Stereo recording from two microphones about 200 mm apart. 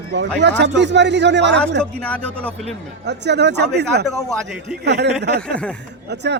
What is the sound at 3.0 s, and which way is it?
Speech, 60° right (ahead or behind).